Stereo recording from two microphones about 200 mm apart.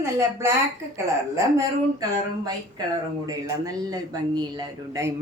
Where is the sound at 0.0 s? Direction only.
15° right (ahead or behind).